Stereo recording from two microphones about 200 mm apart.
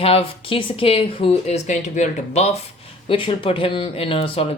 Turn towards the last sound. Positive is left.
turn(degrees=30)  # may be behind; listen again after turning